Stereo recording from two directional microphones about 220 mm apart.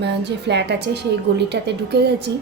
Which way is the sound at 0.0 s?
50° right (ahead or behind).